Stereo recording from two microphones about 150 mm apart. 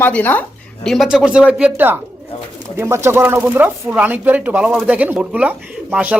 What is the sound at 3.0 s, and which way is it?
Speech, 15° right (ahead or behind).